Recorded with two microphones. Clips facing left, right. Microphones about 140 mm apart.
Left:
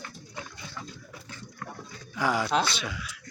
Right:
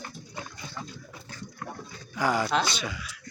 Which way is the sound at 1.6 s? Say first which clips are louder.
Right 2 dB; 15° right (ahead or behind).